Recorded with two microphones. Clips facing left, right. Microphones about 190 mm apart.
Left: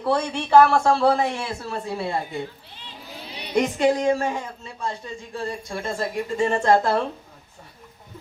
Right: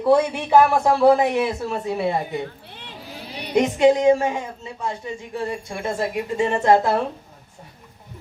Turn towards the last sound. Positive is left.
turn(degrees=-15)  # may be behind; listen again after turning